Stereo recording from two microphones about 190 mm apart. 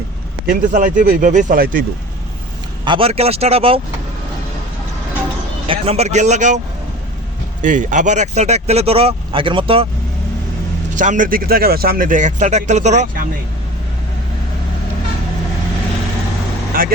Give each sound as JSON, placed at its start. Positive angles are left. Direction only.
{"t": 0.4, "sound": "speech", "side_deg": -45}
{"t": 2.8, "sound": "speech", "side_deg": -25}
{"t": 5.6, "sound": "speech", "side_deg": -30}
{"t": 7.6, "sound": "speech", "side_deg": -45}
{"t": 10.9, "sound": "speech", "side_deg": -40}
{"t": 16.7, "sound": "speech", "side_deg": -50}